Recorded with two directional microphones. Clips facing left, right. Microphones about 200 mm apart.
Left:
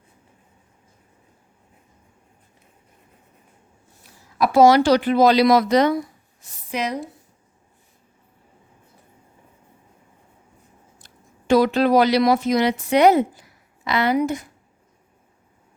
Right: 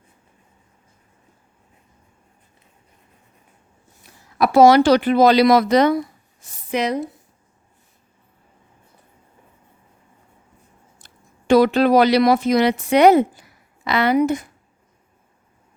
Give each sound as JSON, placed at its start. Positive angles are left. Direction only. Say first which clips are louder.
{"t": 4.4, "sound": "speech", "louder": "right 2 dB", "side_deg": -65}
{"t": 11.4, "sound": "speech", "louder": "right 3 dB", "side_deg": -65}